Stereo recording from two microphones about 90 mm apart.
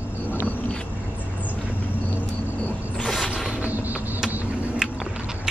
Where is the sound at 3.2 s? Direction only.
5° right (ahead or behind).